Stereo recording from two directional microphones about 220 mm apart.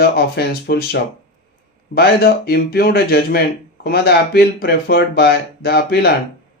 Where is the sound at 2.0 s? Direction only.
45° left (ahead or behind).